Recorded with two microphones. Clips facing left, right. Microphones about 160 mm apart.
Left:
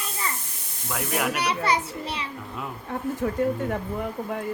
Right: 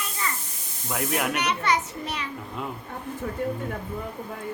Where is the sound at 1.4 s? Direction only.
30° left (ahead or behind).